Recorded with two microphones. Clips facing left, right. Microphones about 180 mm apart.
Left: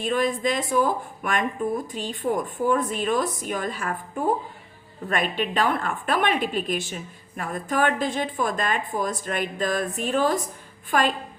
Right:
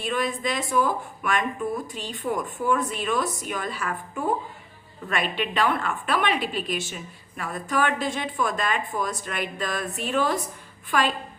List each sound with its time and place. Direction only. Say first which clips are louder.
0.0 s a woman's voice: left 4 dB; 45° left (ahead or behind)